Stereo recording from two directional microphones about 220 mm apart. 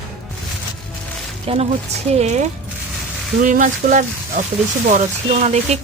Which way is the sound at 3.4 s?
35° right (ahead or behind).